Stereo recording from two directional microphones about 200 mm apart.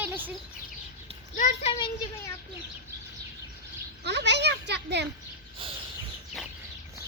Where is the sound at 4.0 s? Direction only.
60° right (ahead or behind).